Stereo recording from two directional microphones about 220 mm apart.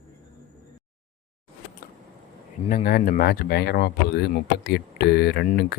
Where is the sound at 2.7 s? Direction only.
40° left (ahead or behind).